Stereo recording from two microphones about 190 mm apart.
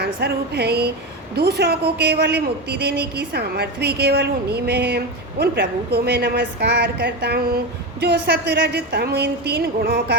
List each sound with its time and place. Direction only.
0.0 s a man's voice: 60° right (ahead or behind)